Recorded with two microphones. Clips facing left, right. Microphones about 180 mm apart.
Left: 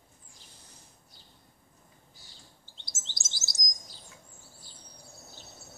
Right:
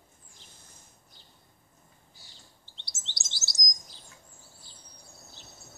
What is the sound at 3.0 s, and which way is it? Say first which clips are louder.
Chirp: right 1 dB; 45° left (ahead or behind).